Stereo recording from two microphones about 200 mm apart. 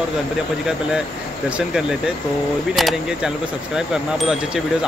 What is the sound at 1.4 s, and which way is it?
Speech, 5° right (ahead or behind).